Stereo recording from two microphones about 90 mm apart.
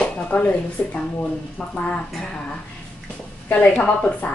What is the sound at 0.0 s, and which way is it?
A woman's voice, 15° left (ahead or behind).